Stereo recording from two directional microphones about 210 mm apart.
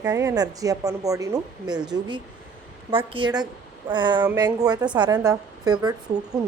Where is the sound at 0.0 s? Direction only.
15° right (ahead or behind).